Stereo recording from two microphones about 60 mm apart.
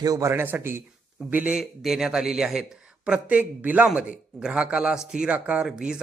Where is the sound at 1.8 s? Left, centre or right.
Centre.